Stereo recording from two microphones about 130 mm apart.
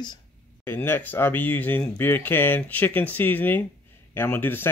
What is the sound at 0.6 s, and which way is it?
Speech, 15° left (ahead or behind).